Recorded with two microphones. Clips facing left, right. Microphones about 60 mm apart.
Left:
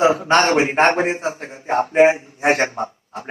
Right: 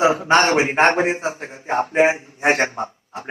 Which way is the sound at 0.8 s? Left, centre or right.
Centre.